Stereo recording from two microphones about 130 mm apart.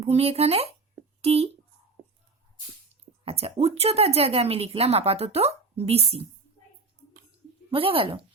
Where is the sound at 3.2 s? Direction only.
50° right (ahead or behind).